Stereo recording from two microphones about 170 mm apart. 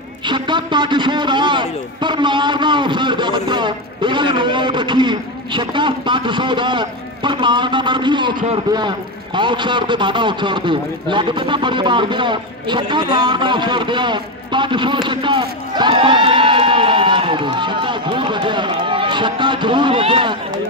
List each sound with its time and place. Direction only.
0.3 s a man's voice: 25° right (ahead or behind)